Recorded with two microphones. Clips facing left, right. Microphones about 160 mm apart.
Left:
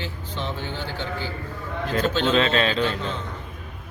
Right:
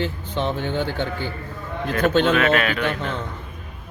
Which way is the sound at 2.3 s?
25° left (ahead or behind).